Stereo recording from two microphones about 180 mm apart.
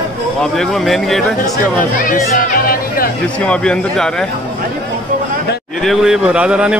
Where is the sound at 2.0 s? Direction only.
50° left (ahead or behind).